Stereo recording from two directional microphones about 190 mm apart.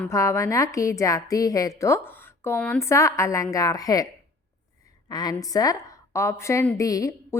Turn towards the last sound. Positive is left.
turn(degrees=15)  # may be behind; listen again after turning